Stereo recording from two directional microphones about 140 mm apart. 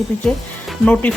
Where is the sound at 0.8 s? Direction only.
10° left (ahead or behind).